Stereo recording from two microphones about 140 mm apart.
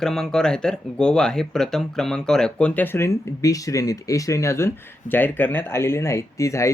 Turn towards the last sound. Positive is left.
turn(degrees=20)  # may be behind; listen again after turning